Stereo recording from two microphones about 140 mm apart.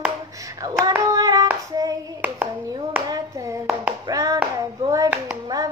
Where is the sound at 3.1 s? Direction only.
20° right (ahead or behind).